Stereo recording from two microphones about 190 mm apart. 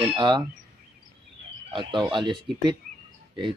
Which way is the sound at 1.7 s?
25° right (ahead or behind).